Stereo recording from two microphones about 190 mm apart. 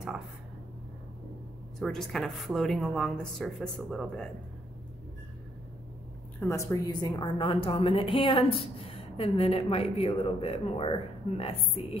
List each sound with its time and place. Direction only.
1.8 s speech: centre (ahead or behind)
6.4 s a woman's voice: 15° left (ahead or behind)